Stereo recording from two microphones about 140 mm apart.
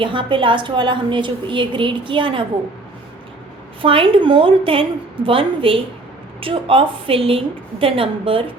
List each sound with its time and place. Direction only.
0.0 s a woman's voice: 35° right (ahead or behind)
3.8 s a woman's voice: 40° right (ahead or behind)